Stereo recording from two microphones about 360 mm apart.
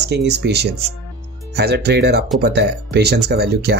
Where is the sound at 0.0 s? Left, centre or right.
Right.